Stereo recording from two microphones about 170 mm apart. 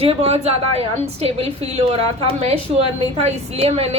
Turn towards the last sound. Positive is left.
turn(degrees=-35)  # may be behind; listen again after turning